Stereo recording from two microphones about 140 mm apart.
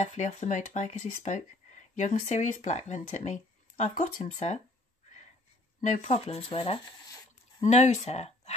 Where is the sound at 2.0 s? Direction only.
60° left (ahead or behind).